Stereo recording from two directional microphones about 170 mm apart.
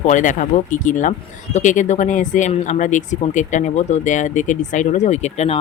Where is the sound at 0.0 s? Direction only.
50° left (ahead or behind).